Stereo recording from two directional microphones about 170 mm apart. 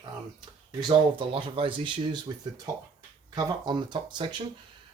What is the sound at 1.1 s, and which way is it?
Speech, 30° right (ahead or behind).